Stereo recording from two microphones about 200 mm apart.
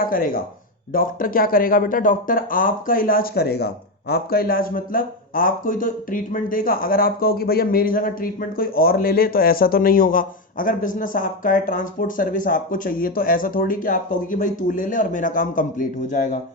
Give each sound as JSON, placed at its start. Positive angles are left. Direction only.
{"t": 0.0, "sound": "speech", "side_deg": 45}